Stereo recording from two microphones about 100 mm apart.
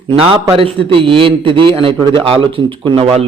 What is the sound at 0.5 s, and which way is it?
A man's voice, 60° right (ahead or behind).